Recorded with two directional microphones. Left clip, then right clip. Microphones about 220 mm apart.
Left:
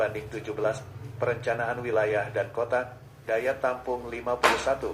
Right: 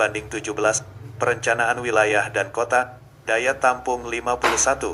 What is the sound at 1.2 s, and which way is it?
A man's voice, 50° right (ahead or behind).